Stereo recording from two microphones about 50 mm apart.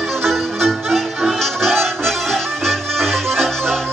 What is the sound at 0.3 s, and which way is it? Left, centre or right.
Music, centre.